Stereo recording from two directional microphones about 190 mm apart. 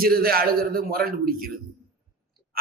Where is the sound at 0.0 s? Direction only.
50° right (ahead or behind).